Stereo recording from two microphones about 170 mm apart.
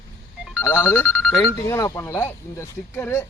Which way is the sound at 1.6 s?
20° left (ahead or behind).